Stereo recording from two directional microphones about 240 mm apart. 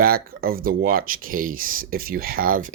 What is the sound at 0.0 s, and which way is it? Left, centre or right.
Speech, right.